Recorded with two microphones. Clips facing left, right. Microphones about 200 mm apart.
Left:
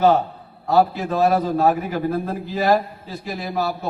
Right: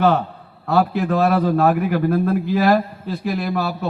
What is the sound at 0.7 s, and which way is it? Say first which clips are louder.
A man's voice: even; 60° right (ahead or behind).